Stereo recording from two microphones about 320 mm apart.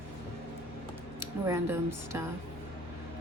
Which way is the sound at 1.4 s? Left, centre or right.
Centre.